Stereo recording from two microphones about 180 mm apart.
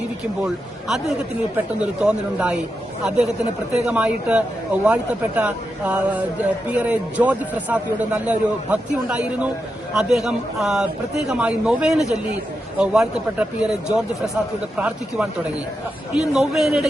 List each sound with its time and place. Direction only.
0.4 s a man's voice: centre (ahead or behind)
3.8 s a man's voice: 5° right (ahead or behind)